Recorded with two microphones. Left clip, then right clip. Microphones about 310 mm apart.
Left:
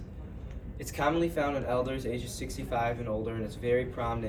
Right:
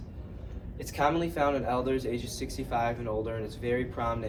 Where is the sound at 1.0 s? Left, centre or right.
Centre.